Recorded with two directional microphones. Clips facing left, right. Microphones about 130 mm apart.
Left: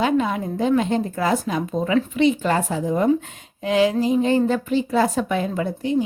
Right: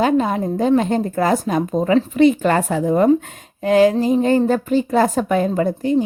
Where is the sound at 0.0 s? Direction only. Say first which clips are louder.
Right 3 dB; 40° right (ahead or behind); by 3.1 s 60° right (ahead or behind).